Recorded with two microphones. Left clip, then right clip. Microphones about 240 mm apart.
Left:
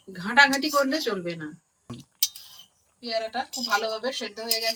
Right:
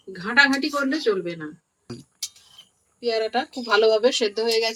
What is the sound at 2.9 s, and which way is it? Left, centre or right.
Speech, right.